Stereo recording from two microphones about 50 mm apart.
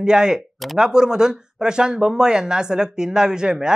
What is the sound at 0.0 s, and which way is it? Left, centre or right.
Speech, centre.